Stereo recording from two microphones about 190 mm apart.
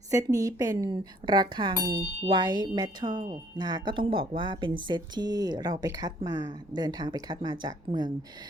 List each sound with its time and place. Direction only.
0.1 s speech: 15° right (ahead or behind)